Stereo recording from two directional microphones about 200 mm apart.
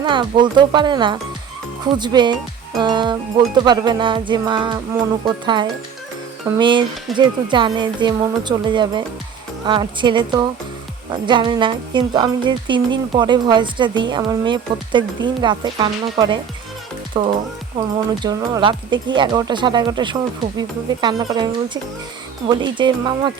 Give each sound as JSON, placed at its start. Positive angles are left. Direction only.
{"t": 0.0, "sound": "speech", "side_deg": -25}